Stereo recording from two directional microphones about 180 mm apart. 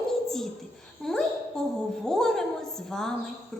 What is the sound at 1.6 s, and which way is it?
A woman's voice, 5° left (ahead or behind).